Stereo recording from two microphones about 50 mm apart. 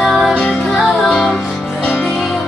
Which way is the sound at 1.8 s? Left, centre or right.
Left.